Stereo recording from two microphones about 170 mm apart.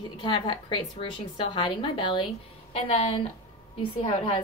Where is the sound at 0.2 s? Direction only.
30° left (ahead or behind).